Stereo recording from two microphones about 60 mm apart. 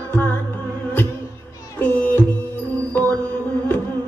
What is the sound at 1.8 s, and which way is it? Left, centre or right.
Music, left.